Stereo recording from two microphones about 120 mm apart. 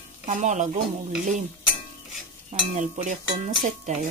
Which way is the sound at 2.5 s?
85° right.